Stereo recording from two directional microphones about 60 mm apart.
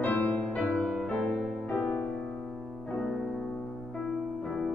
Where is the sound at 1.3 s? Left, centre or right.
Centre.